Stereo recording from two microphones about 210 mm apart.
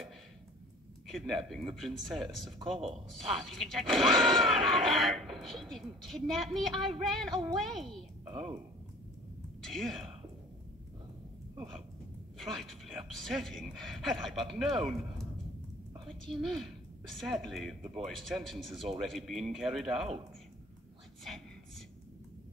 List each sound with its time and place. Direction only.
1.1 s speech: centre (ahead or behind)
8.3 s speech: 25° right (ahead or behind)
9.7 s speech: centre (ahead or behind)
12.4 s speech: centre (ahead or behind)